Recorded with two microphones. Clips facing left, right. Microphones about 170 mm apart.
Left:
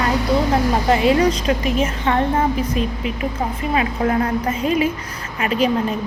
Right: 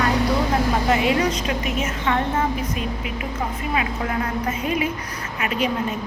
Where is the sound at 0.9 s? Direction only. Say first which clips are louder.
Left 6 dB; 30° left (ahead or behind).